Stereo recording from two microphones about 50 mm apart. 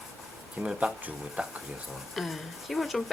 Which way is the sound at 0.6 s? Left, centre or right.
Centre.